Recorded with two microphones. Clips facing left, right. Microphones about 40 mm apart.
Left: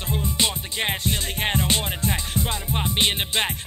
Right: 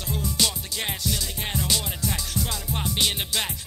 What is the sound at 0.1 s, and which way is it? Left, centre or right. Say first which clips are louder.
Music: left 2 dB; left.